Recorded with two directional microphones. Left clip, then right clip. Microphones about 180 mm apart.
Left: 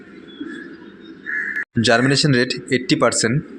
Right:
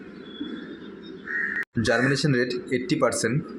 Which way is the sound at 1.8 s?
25° left (ahead or behind).